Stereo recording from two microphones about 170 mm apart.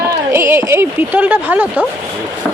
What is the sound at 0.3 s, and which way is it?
Speech, 15° right (ahead or behind).